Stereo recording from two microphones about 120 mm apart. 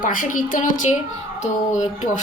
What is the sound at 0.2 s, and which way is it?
A woman's voice, 90° left.